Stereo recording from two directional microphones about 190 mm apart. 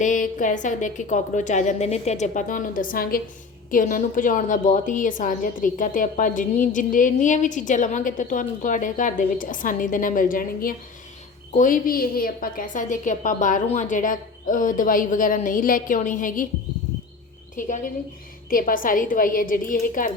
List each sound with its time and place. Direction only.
0.0 s a woman's voice: 45° left (ahead or behind)
17.6 s a woman's voice: 45° left (ahead or behind)